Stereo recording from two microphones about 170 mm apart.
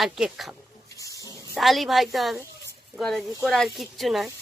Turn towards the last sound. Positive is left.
turn(degrees=0)  # may be behind; listen again after turning